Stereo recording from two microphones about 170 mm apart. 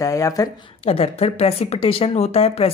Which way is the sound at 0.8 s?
35° left (ahead or behind).